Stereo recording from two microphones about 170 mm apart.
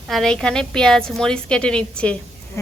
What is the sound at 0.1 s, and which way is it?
A woman's voice, centre (ahead or behind).